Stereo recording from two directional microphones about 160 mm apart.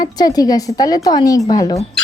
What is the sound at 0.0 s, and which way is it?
A woman's voice, 25° left (ahead or behind).